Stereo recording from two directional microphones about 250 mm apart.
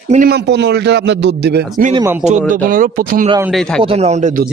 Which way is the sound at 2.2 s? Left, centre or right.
Right.